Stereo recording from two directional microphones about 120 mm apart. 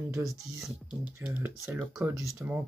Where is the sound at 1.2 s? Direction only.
15° right (ahead or behind).